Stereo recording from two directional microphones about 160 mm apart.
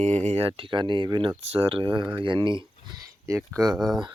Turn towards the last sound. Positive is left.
turn(degrees=0)  # may be behind; listen again after turning